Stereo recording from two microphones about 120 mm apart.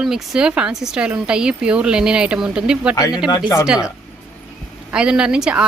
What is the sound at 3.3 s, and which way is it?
Speech, 25° left (ahead or behind).